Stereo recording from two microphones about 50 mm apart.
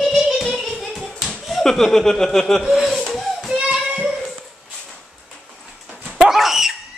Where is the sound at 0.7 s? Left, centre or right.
Centre.